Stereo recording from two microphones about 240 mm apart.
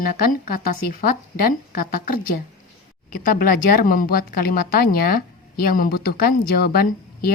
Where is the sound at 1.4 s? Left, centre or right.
Left.